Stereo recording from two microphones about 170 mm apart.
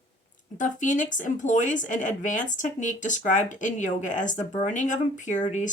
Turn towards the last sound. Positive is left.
turn(degrees=45)  # may be behind; listen again after turning